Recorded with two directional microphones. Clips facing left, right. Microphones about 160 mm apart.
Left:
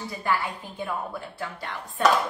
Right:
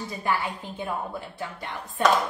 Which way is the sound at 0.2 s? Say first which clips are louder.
Even; 20° right (ahead or behind).